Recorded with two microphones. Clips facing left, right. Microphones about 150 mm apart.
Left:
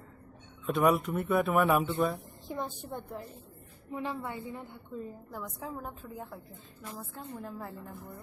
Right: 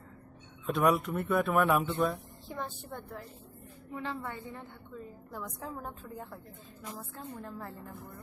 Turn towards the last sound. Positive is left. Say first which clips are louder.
# left 1 dB
turn(degrees=5)  # may be behind; listen again after turning